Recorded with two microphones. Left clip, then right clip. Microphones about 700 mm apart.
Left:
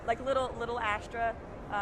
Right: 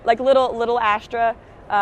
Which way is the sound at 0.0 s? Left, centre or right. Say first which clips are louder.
Right 15 dB; right.